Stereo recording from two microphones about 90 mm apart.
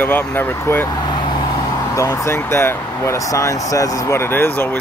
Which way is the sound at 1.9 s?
35° left (ahead or behind).